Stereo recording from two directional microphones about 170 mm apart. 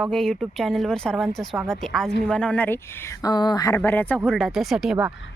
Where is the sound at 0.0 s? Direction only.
5° left (ahead or behind); by 3.8 s 20° left (ahead or behind).